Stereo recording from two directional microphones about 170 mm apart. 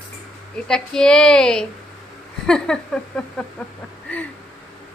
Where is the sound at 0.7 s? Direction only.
5° left (ahead or behind).